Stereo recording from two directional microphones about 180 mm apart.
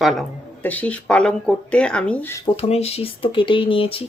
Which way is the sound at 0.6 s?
10° left (ahead or behind).